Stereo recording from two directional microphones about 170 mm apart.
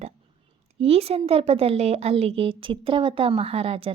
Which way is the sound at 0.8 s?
35° right (ahead or behind).